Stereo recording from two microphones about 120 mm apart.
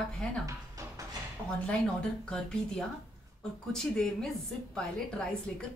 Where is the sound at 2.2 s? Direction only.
5° left (ahead or behind).